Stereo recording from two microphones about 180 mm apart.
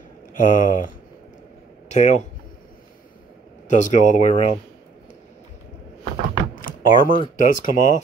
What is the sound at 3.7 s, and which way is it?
Speech, 40° left (ahead or behind).